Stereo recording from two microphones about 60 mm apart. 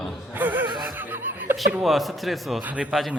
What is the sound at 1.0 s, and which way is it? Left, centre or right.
Laughter, right.